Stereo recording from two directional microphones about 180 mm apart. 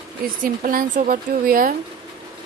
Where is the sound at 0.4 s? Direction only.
50° right (ahead or behind).